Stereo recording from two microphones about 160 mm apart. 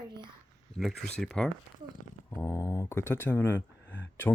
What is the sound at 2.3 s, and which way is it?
Speech, 15° left (ahead or behind).